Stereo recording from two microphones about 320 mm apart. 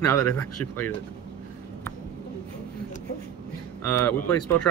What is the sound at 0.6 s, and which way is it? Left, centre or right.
Speech, left.